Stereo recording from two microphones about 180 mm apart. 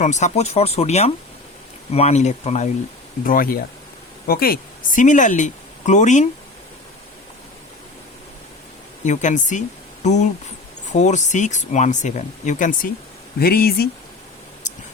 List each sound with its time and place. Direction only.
0.0 s speech: 40° left (ahead or behind)
3.2 s speech: 50° left (ahead or behind)
9.0 s speech: 45° left (ahead or behind)
13.4 s speech: 60° left (ahead or behind)
14.6 s a sound: 40° left (ahead or behind)